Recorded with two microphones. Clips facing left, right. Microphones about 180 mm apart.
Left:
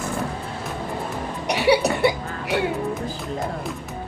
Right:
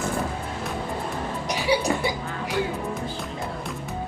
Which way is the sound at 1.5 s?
65° left (ahead or behind).